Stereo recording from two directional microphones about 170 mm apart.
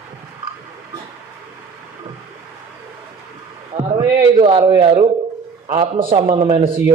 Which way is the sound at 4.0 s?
30° right (ahead or behind).